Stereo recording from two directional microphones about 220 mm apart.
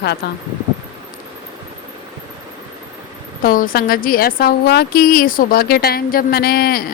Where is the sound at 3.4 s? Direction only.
40° left (ahead or behind).